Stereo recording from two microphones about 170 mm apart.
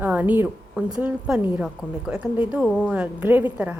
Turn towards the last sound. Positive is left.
turn(degrees=-10)  # may be behind; listen again after turning